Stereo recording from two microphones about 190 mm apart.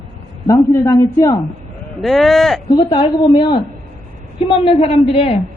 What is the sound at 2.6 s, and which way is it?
A woman's voice, 20° left (ahead or behind).